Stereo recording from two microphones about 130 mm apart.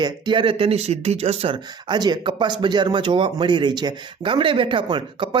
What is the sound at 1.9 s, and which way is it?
Speech, 35° right (ahead or behind).